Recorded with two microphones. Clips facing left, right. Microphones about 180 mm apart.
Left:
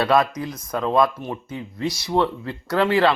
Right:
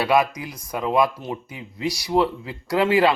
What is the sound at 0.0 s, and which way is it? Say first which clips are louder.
A man's voice: left 1 dB; 10° right (ahead or behind).